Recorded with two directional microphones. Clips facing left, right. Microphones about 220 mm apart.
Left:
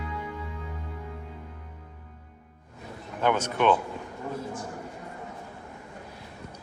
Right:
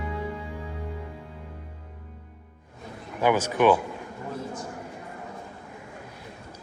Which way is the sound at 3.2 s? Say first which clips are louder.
Right 3 dB; 5° right (ahead or behind).